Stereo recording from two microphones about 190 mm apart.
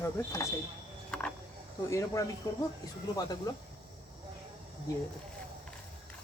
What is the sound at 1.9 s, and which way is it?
Speech, 15° left (ahead or behind).